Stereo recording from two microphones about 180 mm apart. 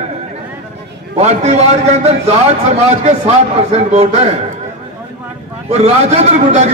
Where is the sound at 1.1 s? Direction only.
35° right (ahead or behind).